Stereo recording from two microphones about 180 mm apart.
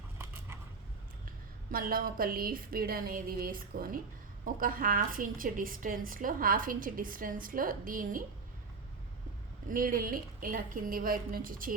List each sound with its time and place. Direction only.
0.2 s a sound: 15° right (ahead or behind)
1.7 s a woman's voice: 55° right (ahead or behind)
9.6 s a woman's voice: 50° right (ahead or behind)